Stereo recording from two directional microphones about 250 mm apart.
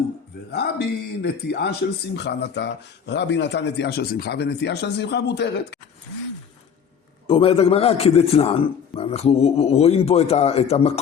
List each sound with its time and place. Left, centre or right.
0.5 s speech: left
7.3 s a man's voice: left